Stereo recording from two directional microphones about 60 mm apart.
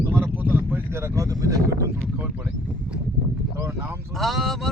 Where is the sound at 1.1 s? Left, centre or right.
Right.